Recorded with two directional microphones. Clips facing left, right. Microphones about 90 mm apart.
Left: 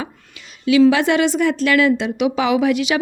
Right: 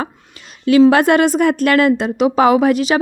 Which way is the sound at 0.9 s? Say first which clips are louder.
Right 4 dB; 50° right (ahead or behind).